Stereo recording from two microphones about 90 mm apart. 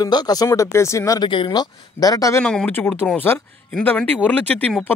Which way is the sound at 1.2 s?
65° left (ahead or behind).